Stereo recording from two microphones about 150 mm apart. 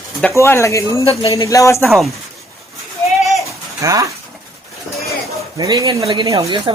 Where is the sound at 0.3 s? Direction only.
20° left (ahead or behind).